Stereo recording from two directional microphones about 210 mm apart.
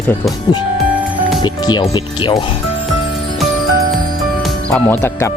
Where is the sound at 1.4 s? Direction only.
20° left (ahead or behind).